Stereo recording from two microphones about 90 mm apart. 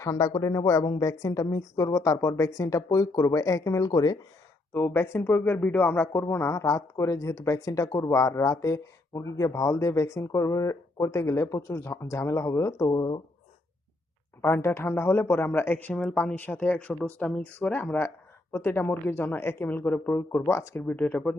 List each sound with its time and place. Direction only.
0.0 s speech: 40° left (ahead or behind)
4.7 s speech: 25° left (ahead or behind)
6.5 s speech: 35° left (ahead or behind)
13.0 s speech: 60° left (ahead or behind)
14.4 s speech: 25° left (ahead or behind)
16.0 s speech: 5° left (ahead or behind)
16.3 s speech: 20° left (ahead or behind)
20.7 s speech: 20° left (ahead or behind)